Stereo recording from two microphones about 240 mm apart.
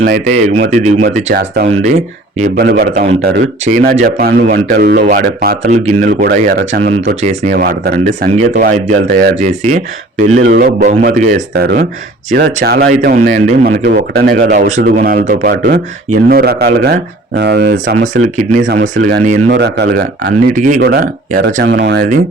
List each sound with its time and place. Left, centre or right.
0.0 s speech: right
3.6 s speech: right
17.9 s speech: right
19.5 s speech: right